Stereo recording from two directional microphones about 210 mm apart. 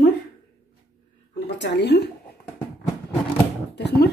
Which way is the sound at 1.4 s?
55° left (ahead or behind).